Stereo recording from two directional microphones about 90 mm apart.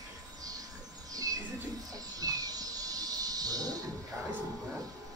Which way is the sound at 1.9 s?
45° right (ahead or behind).